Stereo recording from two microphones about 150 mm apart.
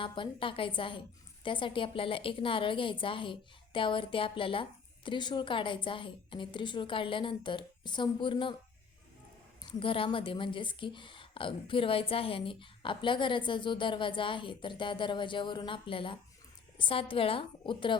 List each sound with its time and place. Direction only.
0.0 s a woman's voice: 35° left (ahead or behind)
9.6 s a woman's voice: 35° left (ahead or behind)